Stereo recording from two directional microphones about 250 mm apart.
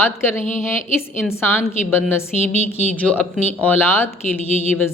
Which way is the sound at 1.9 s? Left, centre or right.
Centre.